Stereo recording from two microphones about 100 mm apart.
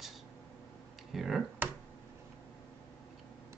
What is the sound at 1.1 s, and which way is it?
Speech, 5° right (ahead or behind).